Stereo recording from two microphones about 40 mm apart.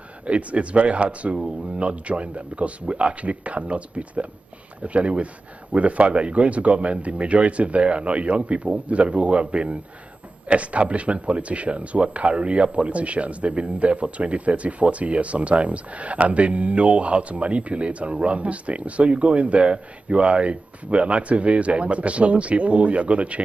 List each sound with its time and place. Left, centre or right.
0.3 s speech: right